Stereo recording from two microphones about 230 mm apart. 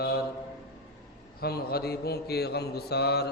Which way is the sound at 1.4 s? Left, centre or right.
Left.